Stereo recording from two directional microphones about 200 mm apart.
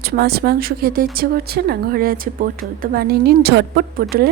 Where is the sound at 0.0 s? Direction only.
50° right (ahead or behind).